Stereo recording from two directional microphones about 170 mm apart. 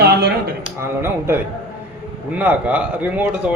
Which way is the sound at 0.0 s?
70° right (ahead or behind).